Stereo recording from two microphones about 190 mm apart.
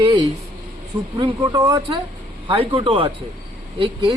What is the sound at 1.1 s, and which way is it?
Speech, 25° right (ahead or behind).